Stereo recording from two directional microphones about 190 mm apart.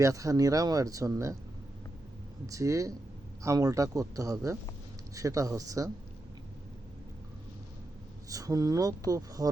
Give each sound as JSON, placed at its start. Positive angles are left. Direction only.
{"t": 0.0, "sound": "speech", "side_deg": -15}
{"t": 2.5, "sound": "speech", "side_deg": -15}
{"t": 8.3, "sound": "speech", "side_deg": -20}